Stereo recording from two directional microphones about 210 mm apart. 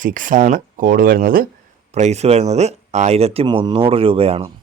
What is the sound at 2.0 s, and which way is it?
Speech, 30° right (ahead or behind).